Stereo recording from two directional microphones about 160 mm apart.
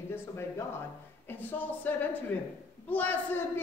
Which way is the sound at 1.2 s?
10° left (ahead or behind).